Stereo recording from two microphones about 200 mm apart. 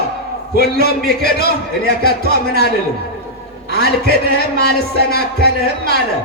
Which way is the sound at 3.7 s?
50° left (ahead or behind).